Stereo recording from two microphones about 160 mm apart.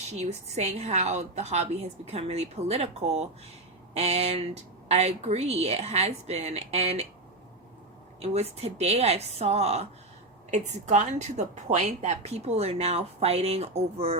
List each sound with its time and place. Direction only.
0.1 s a woman's voice: 45° right (ahead or behind)
8.2 s a woman's voice: 40° right (ahead or behind)